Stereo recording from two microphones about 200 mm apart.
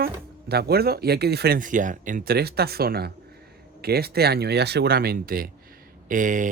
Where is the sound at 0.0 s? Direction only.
50° right (ahead or behind).